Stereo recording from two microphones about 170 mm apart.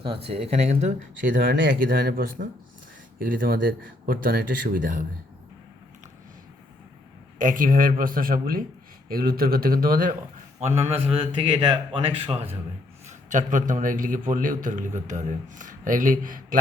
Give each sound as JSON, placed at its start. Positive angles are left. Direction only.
{"t": 0.0, "sound": "a man's voice", "side_deg": -35}
{"t": 7.3, "sound": "speech", "side_deg": -50}
{"t": 10.6, "sound": "a man's voice", "side_deg": -40}
{"t": 13.1, "sound": "a man's voice", "side_deg": -50}